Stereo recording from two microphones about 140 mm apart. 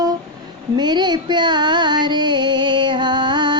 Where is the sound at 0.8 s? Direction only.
30° right (ahead or behind).